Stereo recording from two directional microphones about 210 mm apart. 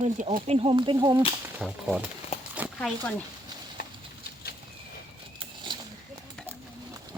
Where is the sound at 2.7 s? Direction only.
10° left (ahead or behind).